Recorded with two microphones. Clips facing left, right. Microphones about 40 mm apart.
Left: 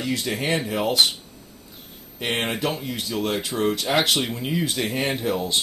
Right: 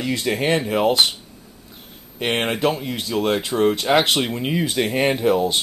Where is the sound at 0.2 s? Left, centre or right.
Centre.